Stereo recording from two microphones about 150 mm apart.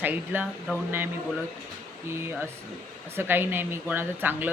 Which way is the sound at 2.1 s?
15° right (ahead or behind).